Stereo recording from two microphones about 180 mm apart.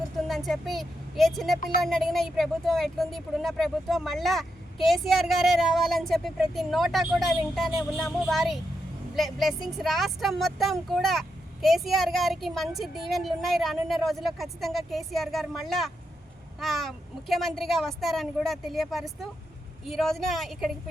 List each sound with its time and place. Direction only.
0.3 s speech: centre (ahead or behind)